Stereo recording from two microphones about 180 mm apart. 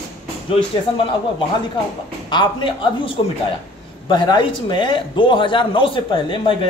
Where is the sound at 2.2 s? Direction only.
25° left (ahead or behind).